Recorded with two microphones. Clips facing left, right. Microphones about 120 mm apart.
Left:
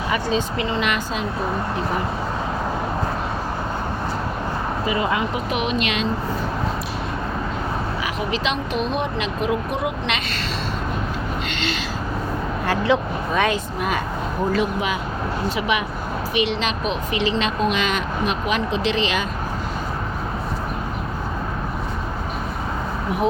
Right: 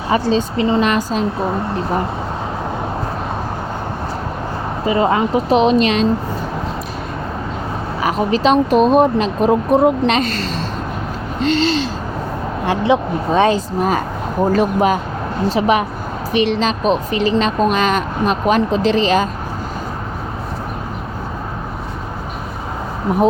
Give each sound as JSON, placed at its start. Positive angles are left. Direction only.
{"t": 0.1, "sound": "speech", "side_deg": -30}
{"t": 4.9, "sound": "speech", "side_deg": -35}
{"t": 8.0, "sound": "speech", "side_deg": -40}
{"t": 11.3, "sound": "gasp", "side_deg": -35}
{"t": 12.6, "sound": "speech", "side_deg": -20}
{"t": 13.4, "sound": "speech", "side_deg": -35}